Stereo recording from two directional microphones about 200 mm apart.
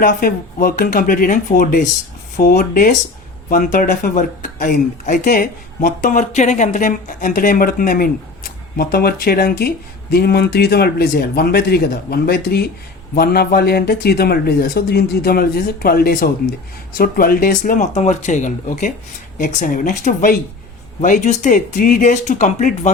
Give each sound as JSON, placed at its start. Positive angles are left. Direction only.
{"t": 0.0, "sound": "speech", "side_deg": 45}